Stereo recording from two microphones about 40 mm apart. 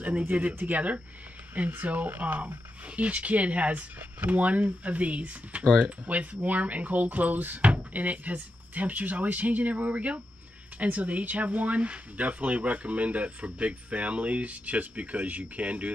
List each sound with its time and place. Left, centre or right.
0.3 s speech: right